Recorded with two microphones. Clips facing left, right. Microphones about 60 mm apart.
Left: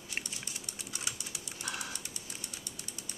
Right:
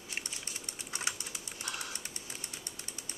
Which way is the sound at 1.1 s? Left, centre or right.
Right.